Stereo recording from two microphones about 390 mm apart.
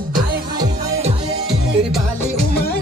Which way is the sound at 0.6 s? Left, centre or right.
Centre.